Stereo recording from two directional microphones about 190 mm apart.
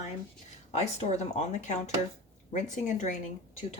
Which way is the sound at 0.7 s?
35° left (ahead or behind).